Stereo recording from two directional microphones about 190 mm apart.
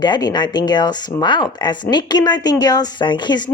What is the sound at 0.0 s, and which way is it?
Speech, 20° left (ahead or behind).